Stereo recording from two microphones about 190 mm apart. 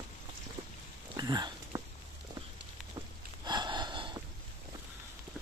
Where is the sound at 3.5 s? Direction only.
25° right (ahead or behind).